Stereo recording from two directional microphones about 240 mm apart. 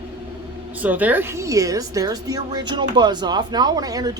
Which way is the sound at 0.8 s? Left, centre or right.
Centre.